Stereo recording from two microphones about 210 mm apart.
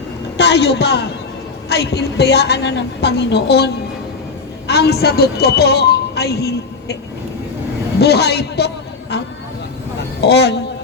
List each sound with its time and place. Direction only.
0.3 s a woman's voice: 55° left (ahead or behind)
4.7 s speech: 50° left (ahead or behind)
7.9 s a sound: 50° left (ahead or behind)
10.2 s a woman's voice: 55° left (ahead or behind)